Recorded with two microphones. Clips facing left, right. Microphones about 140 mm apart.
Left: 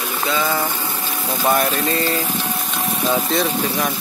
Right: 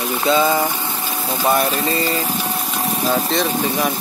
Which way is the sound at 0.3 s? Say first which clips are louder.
Right 5 dB; 20° right (ahead or behind).